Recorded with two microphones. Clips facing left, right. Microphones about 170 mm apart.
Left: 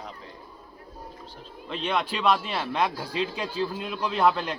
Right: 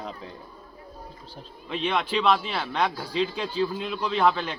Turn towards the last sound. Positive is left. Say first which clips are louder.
# even
turn(degrees=0)  # may be behind; listen again after turning